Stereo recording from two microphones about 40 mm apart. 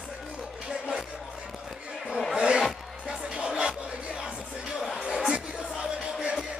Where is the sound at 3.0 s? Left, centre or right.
Right.